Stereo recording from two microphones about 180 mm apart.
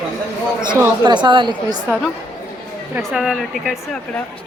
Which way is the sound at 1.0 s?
25° right (ahead or behind).